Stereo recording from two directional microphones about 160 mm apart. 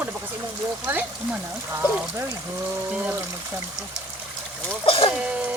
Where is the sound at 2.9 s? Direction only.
10° right (ahead or behind).